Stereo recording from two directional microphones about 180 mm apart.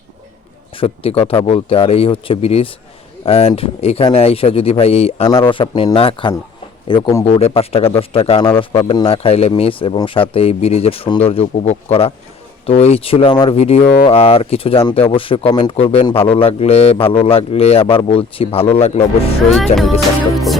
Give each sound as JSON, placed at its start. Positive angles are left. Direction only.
{"t": 0.8, "sound": "a man's voice", "side_deg": 30}
{"t": 7.3, "sound": "speech", "side_deg": 30}
{"t": 19.7, "sound": "music", "side_deg": 0}